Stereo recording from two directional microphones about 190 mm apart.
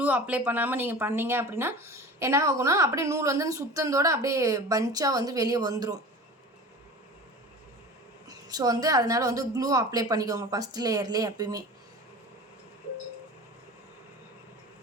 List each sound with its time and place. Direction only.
0.0 s speech: 10° right (ahead or behind)
8.4 s a woman's voice: 20° right (ahead or behind)